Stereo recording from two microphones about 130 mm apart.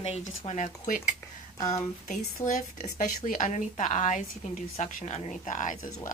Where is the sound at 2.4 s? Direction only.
85° left; by 5.3 s 60° left (ahead or behind).